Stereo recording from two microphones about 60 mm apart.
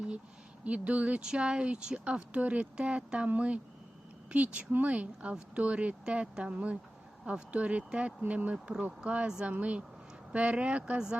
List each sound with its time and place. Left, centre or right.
0.6 s speech: right
9.0 s speech: centre